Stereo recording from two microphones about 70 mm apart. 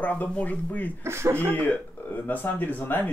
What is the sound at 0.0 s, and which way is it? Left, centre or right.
Speech, left.